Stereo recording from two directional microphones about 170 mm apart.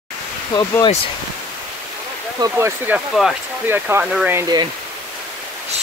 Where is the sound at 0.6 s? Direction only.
25° left (ahead or behind).